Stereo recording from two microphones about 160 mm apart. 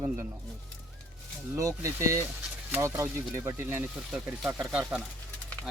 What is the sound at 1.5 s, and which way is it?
Speech, 20° right (ahead or behind).